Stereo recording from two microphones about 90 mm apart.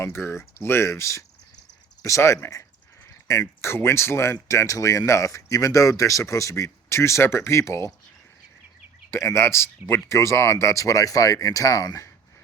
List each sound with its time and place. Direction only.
0.0 s speech: 25° left (ahead or behind)
9.0 s speech: 30° left (ahead or behind)